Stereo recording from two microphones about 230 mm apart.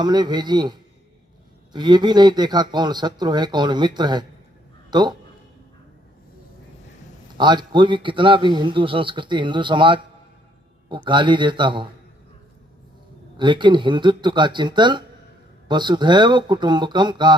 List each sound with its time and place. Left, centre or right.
0.0 s a man's voice: centre
7.3 s a man's voice: centre
13.3 s a man's voice: centre